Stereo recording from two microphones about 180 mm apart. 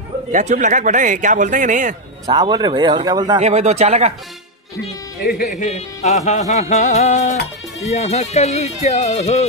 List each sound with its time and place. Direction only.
0.3 s speech: 45° right (ahead or behind)
2.2 s speech: 25° right (ahead or behind)
3.3 s a man's voice: 40° right (ahead or behind)
5.2 s speech: 50° left (ahead or behind)